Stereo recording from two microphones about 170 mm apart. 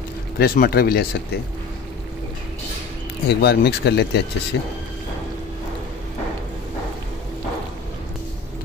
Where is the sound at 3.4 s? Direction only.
75° left (ahead or behind).